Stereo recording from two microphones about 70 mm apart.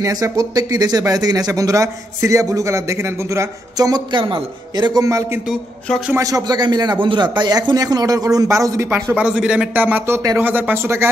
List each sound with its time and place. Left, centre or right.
0.0 s speech: right
3.7 s a man's voice: right
4.7 s speech: right
5.0 s a man's voice: right
8.5 s a man's voice: right
9.1 s a man's voice: centre; by 11.1 s right